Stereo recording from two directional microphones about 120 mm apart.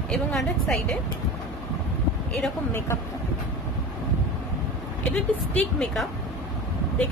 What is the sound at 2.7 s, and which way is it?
Speech, 20° left (ahead or behind).